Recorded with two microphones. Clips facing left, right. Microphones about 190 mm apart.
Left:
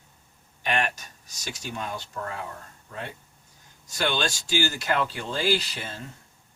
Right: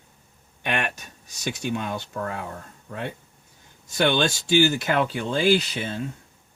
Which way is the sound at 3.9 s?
60° right (ahead or behind).